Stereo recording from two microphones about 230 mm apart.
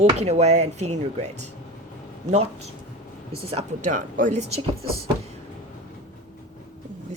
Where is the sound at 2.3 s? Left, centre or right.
Right.